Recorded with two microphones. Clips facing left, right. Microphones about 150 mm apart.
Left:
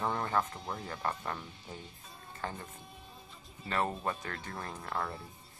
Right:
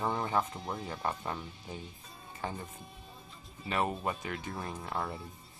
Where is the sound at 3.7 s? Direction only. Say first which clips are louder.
Right 1 dB; 15° right (ahead or behind).